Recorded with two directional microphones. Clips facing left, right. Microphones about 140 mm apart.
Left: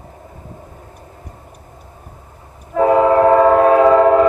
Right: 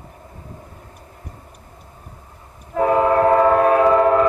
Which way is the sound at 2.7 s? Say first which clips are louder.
Left 4 dB; 25° left (ahead or behind).